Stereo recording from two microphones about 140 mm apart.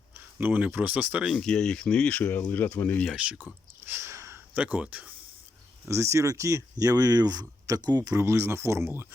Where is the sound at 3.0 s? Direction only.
5° right (ahead or behind).